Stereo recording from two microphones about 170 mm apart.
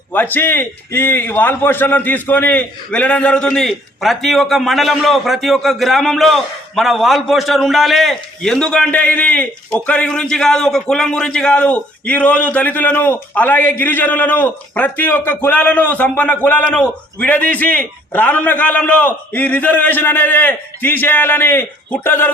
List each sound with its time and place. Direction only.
0.1 s a man's voice: 10° left (ahead or behind)